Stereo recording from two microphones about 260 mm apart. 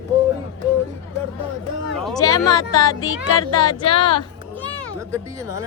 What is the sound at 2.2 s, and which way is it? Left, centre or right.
Speech, centre.